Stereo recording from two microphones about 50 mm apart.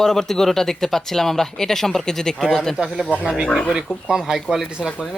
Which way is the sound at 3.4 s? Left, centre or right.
Centre.